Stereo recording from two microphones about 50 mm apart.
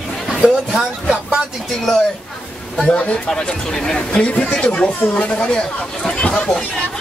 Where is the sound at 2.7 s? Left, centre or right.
Centre.